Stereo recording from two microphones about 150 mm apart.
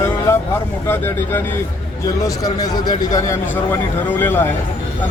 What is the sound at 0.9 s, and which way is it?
A man's voice, 15° left (ahead or behind).